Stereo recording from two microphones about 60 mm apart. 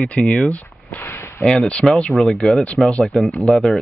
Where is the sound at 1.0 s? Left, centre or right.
Left.